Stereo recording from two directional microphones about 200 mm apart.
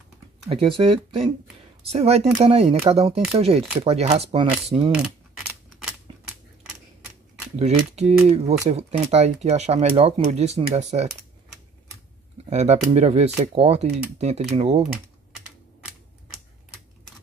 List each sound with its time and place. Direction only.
0.5 s speech: 25° right (ahead or behind)
6.1 s scissors: 25° right (ahead or behind)
7.5 s speech: 35° right (ahead or behind)
12.4 s speech: 35° right (ahead or behind)
14.8 s typing: 5° right (ahead or behind)